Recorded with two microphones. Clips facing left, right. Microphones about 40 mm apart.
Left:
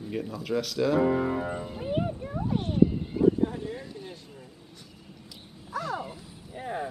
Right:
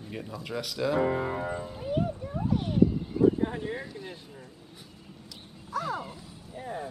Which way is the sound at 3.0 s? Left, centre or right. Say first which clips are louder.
Right 2 dB; left.